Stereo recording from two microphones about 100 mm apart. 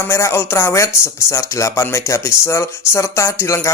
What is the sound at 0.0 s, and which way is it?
Speech, 30° left (ahead or behind).